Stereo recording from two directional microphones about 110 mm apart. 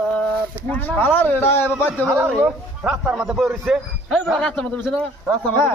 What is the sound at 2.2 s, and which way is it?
A man's voice, 10° right (ahead or behind).